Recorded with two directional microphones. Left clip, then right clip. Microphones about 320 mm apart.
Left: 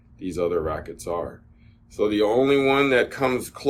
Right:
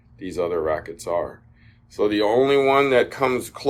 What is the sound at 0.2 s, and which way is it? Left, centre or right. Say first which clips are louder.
Speech: right 1 dB; right.